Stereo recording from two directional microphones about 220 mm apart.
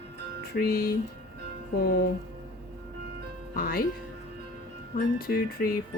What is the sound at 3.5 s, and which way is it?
Speech, 45° left (ahead or behind).